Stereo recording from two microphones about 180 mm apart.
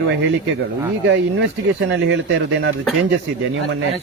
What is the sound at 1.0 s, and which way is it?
Speech, 90° right.